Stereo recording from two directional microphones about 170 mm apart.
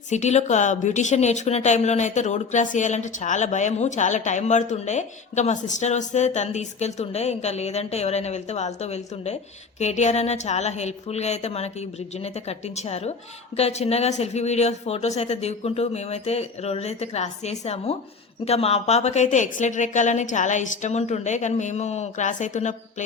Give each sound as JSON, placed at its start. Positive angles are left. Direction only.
{"t": 0.1, "sound": "a woman's voice", "side_deg": 40}